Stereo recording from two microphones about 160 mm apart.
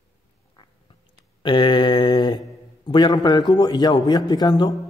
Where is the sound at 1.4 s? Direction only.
30° left (ahead or behind).